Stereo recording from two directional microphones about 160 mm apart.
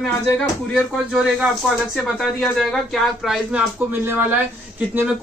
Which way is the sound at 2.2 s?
Centre (ahead or behind).